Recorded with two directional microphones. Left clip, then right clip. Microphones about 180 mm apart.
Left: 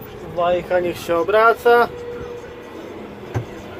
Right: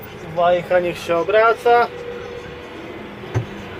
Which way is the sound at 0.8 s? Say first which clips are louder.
Even; 10° left (ahead or behind).